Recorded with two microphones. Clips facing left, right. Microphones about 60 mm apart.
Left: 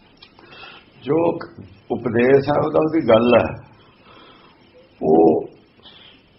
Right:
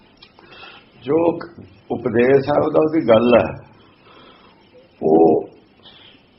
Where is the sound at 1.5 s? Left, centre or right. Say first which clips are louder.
Right 1 dB; right.